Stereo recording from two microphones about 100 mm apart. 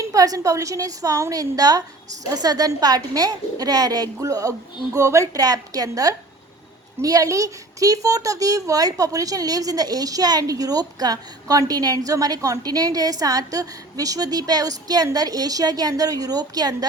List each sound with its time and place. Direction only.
0.0 s a woman's voice: 35° right (ahead or behind)